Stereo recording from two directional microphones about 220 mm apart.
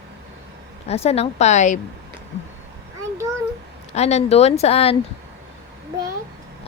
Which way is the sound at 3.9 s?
30° left (ahead or behind).